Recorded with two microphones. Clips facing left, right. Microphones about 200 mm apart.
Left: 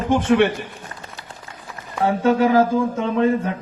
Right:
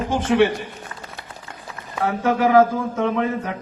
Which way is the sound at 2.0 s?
30° left (ahead or behind).